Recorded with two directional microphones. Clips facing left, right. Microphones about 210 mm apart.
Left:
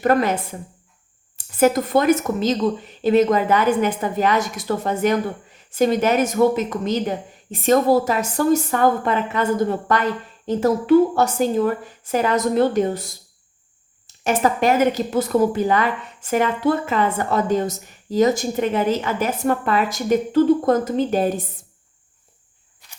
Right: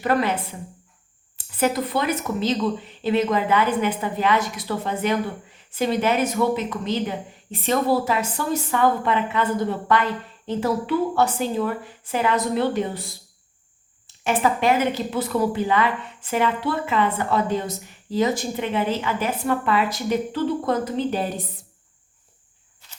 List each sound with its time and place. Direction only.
0.0 s speech: 45° left (ahead or behind)
14.3 s speech: 45° left (ahead or behind)